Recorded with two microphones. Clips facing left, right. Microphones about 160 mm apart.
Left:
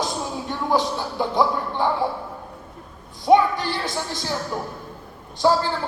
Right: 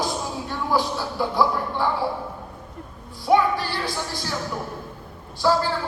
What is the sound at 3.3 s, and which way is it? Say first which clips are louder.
Speech: left 3 dB; 20° left (ahead or behind).